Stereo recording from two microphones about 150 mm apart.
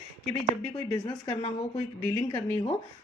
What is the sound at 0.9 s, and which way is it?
Speech, 25° left (ahead or behind).